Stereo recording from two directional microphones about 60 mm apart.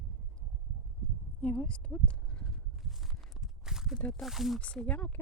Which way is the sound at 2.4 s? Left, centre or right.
Centre.